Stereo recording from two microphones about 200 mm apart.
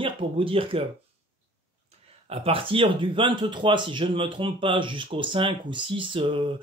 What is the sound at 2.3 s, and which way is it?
Speech, 30° right (ahead or behind).